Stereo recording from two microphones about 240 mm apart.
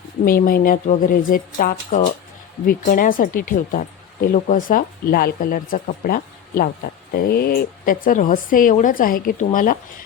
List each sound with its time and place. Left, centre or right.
0.3 s speech: left